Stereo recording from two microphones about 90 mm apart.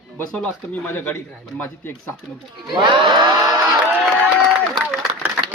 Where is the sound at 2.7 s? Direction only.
65° right (ahead or behind).